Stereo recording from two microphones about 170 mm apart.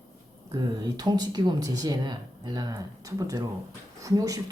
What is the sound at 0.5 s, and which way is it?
Speech, 25° right (ahead or behind).